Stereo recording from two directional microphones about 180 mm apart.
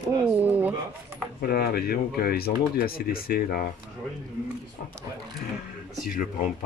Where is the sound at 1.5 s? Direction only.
60° left (ahead or behind).